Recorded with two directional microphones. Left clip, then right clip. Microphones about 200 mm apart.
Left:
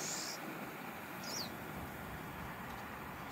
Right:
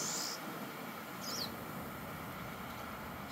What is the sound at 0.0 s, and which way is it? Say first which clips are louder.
Vehicle: right 3 dB; 35° right (ahead or behind).